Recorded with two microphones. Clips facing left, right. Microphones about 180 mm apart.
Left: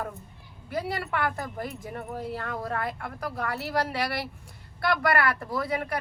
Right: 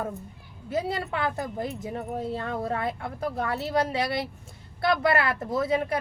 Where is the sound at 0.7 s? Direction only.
25° right (ahead or behind).